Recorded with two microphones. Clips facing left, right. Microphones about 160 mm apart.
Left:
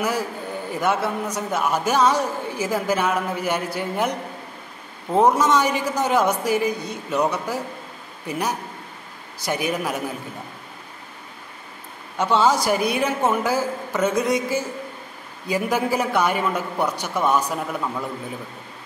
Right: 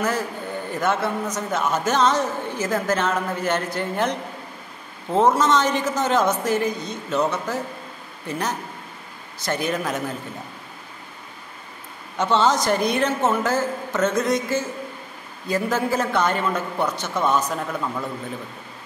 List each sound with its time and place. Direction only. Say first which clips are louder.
0.7 s a man's voice: left 1 dB; 10° left (ahead or behind)
12.2 s a man's voice: left 1 dB; 10° left (ahead or behind)